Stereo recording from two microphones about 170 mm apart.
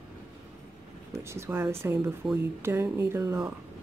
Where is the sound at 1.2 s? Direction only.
15° right (ahead or behind).